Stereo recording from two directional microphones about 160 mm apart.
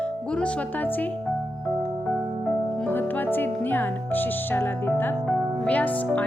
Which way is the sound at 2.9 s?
10° left (ahead or behind).